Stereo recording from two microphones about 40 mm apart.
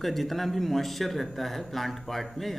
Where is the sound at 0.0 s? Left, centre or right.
Centre.